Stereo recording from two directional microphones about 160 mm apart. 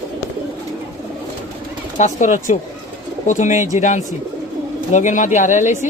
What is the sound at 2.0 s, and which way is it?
Speech, 50° left (ahead or behind).